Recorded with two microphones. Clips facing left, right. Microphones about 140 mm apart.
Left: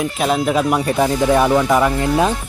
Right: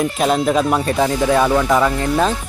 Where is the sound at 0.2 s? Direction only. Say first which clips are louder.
Even; 5° left (ahead or behind).